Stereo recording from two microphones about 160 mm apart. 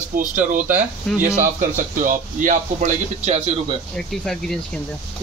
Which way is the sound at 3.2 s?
40° right (ahead or behind).